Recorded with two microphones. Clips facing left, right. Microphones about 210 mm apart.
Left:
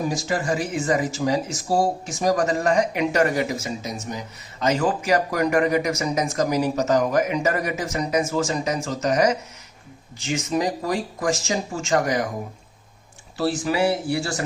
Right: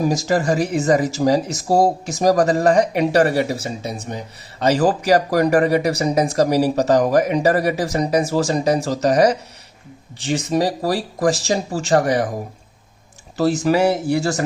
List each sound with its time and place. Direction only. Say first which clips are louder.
0.1 s speech: right 6 dB; 40° right (ahead or behind)
13.3 s speech: right 6 dB; 40° right (ahead or behind)